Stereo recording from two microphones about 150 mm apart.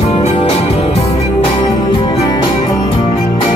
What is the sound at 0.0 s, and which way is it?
Music, 40° left (ahead or behind).